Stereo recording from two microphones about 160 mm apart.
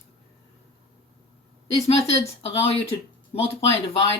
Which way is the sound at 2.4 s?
40° left (ahead or behind).